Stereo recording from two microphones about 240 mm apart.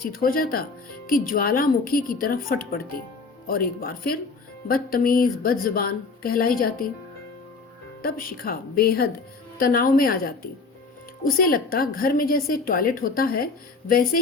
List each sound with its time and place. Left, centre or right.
0.0 s a woman's voice: left
8.0 s a woman's voice: left